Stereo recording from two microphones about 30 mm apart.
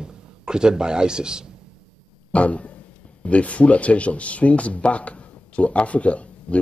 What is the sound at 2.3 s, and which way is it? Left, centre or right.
Speech, left.